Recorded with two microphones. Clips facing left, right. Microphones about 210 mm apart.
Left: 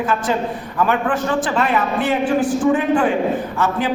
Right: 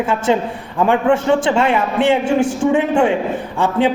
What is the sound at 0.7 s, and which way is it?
A man's voice, 25° right (ahead or behind).